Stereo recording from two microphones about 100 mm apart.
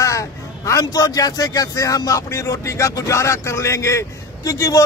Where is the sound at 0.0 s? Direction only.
30° left (ahead or behind).